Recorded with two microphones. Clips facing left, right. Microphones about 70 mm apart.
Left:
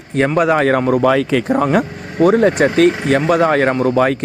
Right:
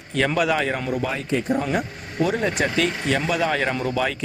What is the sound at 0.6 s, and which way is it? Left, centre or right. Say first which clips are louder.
Speech: left 10 dB; left.